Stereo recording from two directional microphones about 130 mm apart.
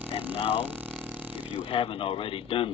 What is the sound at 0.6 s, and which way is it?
Speech, 10° right (ahead or behind).